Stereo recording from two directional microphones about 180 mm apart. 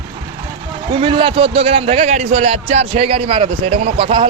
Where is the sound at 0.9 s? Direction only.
30° right (ahead or behind).